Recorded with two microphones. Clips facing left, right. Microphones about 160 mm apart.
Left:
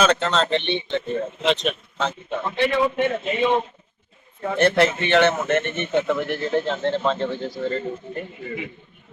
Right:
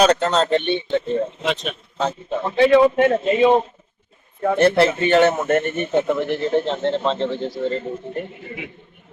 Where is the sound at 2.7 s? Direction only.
40° right (ahead or behind).